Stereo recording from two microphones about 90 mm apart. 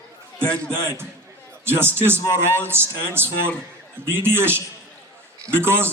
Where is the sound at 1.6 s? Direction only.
25° right (ahead or behind).